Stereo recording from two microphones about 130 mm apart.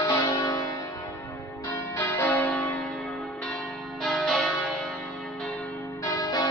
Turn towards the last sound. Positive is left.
turn(degrees=30)  # may be behind; listen again after turning